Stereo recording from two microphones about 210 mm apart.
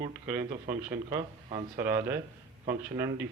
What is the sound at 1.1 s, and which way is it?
Speech, 20° right (ahead or behind).